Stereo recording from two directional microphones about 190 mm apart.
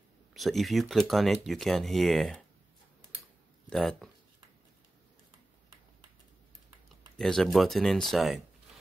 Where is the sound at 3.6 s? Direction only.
Centre (ahead or behind).